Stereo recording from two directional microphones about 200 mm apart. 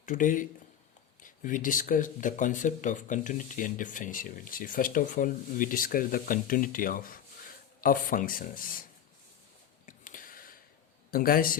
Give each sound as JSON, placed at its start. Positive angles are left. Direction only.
{"t": 0.0, "sound": "speech", "side_deg": 40}
{"t": 9.8, "sound": "a sound", "side_deg": 40}
{"t": 11.1, "sound": "speech", "side_deg": 45}